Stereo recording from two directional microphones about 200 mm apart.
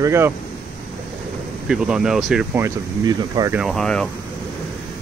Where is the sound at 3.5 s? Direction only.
Centre (ahead or behind).